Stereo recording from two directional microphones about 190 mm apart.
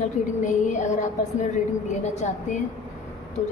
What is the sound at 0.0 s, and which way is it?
A woman's voice, 40° left (ahead or behind).